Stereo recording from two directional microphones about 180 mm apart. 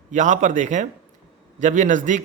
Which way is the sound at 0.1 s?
40° right (ahead or behind).